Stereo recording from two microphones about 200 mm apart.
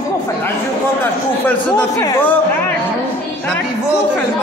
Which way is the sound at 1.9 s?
15° left (ahead or behind).